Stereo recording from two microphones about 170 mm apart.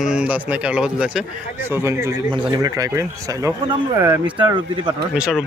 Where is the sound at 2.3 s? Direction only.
25° right (ahead or behind).